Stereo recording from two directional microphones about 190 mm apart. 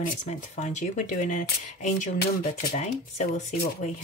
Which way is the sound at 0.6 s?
40° left (ahead or behind).